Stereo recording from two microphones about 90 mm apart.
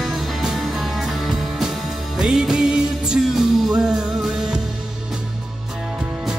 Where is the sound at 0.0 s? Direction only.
5° right (ahead or behind).